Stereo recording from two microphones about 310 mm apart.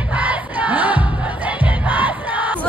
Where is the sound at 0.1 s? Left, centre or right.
Centre.